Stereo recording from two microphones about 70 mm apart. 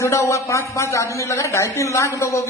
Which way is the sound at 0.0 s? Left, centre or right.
Left.